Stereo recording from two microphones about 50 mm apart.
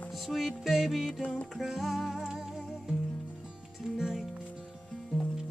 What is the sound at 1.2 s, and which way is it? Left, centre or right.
Music, left.